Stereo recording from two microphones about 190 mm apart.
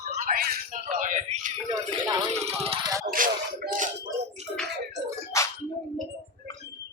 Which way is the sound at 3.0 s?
45° right (ahead or behind).